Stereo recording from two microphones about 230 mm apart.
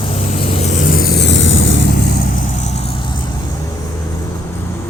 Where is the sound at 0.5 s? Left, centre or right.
Left.